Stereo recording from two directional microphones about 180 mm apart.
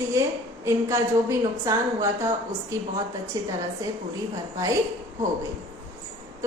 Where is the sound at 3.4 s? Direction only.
20° right (ahead or behind).